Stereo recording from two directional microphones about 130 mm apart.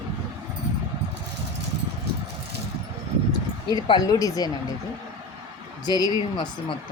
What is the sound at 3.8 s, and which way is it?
Speech, 30° left (ahead or behind).